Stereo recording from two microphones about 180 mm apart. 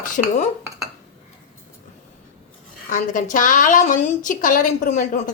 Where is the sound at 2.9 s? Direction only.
45° left (ahead or behind).